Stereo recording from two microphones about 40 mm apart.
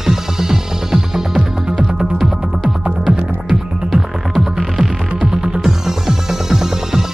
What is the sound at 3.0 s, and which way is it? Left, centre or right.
Music, centre.